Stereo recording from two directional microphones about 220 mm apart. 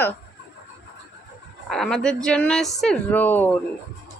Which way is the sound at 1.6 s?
Centre (ahead or behind).